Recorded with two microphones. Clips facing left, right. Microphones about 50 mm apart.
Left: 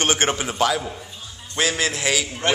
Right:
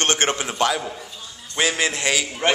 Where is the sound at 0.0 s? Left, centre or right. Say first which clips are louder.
Even; centre.